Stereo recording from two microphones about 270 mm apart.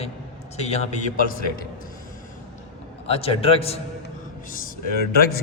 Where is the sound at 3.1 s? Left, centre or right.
Left.